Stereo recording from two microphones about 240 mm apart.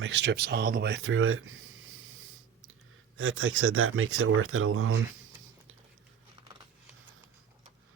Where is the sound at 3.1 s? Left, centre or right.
Right.